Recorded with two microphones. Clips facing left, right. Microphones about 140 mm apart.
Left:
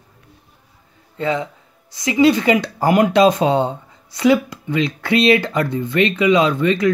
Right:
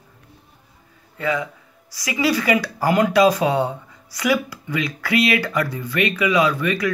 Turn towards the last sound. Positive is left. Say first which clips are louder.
# left 4 dB
turn(degrees=25)  # may be behind; listen again after turning